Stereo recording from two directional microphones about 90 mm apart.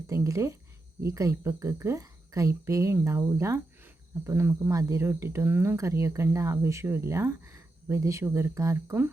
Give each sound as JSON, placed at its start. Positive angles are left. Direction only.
{"t": 0.1, "sound": "speech", "side_deg": -35}